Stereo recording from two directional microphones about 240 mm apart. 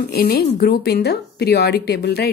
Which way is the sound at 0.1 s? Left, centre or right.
Left.